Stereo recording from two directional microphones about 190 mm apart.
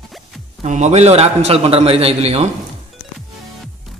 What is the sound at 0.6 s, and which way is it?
A man's voice, 35° right (ahead or behind).